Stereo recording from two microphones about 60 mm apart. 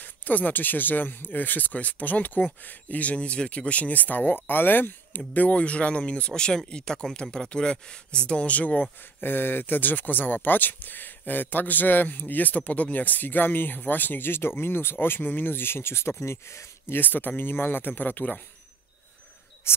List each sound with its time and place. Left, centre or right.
0.0 s speech: left
17.0 s speech: left